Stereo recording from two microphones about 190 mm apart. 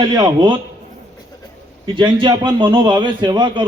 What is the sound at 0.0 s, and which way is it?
Speech, 20° right (ahead or behind).